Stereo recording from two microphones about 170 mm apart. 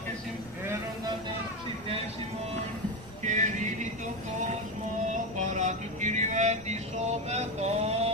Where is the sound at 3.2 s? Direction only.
45° right (ahead or behind).